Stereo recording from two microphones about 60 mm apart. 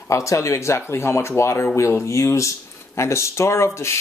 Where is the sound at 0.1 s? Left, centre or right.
Left.